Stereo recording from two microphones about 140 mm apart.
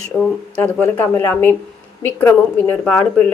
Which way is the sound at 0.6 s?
15° left (ahead or behind).